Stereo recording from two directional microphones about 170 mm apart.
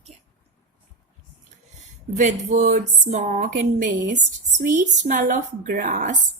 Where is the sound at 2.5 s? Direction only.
45° right (ahead or behind).